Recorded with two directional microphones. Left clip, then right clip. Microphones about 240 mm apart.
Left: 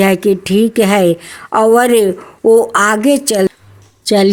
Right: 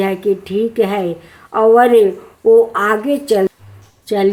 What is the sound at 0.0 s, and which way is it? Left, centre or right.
Speech, left.